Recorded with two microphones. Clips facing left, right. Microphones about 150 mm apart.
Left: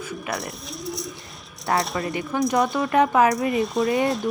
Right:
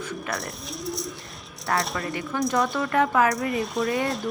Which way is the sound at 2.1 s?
20° left (ahead or behind).